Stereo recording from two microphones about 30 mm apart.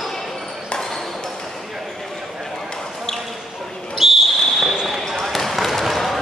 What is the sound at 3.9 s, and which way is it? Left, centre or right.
Basketball bounce, centre.